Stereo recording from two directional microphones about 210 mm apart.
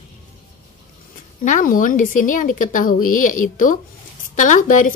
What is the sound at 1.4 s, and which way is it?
Speech, 40° left (ahead or behind).